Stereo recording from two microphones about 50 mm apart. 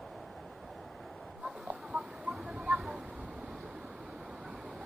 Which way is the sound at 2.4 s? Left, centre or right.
Centre.